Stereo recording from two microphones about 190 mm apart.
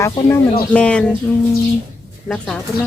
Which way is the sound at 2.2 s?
5° left (ahead or behind).